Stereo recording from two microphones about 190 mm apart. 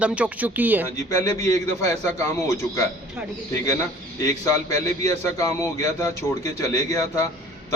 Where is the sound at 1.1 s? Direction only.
15° left (ahead or behind).